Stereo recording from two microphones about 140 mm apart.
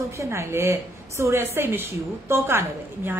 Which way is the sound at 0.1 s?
20° right (ahead or behind).